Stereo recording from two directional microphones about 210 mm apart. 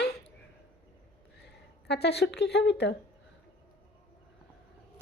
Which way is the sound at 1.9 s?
50° left (ahead or behind).